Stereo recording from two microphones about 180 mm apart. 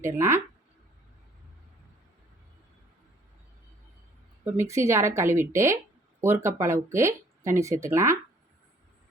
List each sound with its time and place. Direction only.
0.0 s a woman's voice: 15° right (ahead or behind)
4.4 s a woman's voice: 15° right (ahead or behind)